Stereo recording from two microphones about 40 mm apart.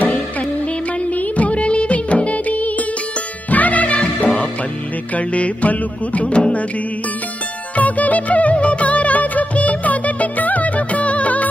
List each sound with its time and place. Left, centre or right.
1.1 s music of bollywood: left
3.4 s music: left
7.7 s music: left